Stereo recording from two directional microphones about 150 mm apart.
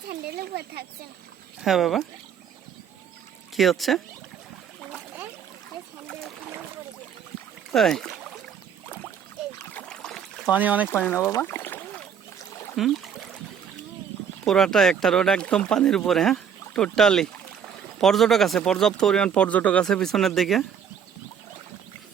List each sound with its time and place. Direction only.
0.1 s speech: 90° right
1.6 s speech: centre (ahead or behind)
3.5 s speech: centre (ahead or behind)
7.7 s rowboat: centre (ahead or behind)
9.6 s boat: 10° left (ahead or behind)
10.5 s speech: 10° right (ahead or behind)
10.8 s a sound: 15° left (ahead or behind)
12.4 s rowboat: 20° left (ahead or behind)
12.7 s a sound: centre (ahead or behind)
14.4 s speech: 5° left (ahead or behind)